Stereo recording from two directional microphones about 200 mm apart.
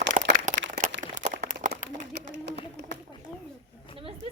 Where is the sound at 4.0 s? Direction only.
25° right (ahead or behind).